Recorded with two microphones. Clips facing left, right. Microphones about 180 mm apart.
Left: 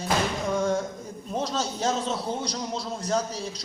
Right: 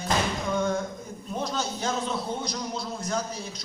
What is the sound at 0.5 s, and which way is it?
A man's voice, 35° left (ahead or behind).